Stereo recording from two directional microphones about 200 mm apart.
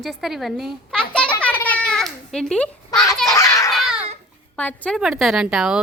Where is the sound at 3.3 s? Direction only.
15° left (ahead or behind).